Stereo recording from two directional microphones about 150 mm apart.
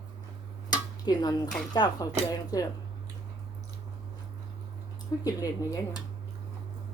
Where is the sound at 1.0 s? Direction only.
25° left (ahead or behind).